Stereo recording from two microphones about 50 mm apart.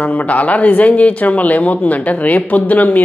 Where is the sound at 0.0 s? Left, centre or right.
Left.